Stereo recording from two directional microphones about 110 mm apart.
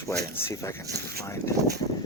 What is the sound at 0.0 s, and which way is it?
Speech, 25° left (ahead or behind).